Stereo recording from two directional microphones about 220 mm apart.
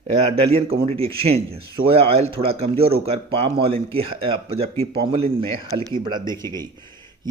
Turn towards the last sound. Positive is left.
turn(degrees=15)  # may be behind; listen again after turning